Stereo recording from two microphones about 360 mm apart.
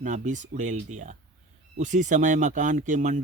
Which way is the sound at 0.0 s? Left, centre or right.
Right.